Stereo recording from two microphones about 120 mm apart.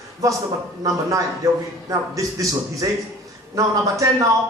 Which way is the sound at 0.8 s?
25° right (ahead or behind).